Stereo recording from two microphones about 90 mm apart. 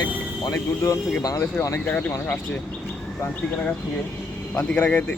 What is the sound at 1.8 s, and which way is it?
Speech, 15° left (ahead or behind).